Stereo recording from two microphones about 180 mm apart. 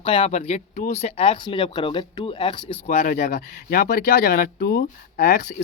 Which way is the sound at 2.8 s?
50° left (ahead or behind).